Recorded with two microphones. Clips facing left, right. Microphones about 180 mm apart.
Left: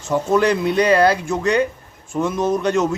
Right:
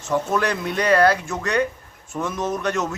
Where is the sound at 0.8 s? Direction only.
15° left (ahead or behind).